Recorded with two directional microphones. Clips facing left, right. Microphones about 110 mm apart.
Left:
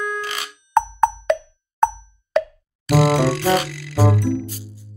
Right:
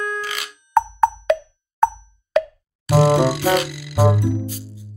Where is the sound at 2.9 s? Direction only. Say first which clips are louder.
Right 1 dB; 25° right (ahead or behind).